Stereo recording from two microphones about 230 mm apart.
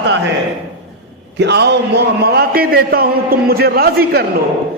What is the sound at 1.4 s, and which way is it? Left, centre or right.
A man's voice, right.